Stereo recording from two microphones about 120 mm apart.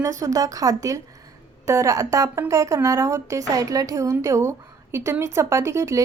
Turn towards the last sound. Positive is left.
turn(degrees=-25)  # may be behind; listen again after turning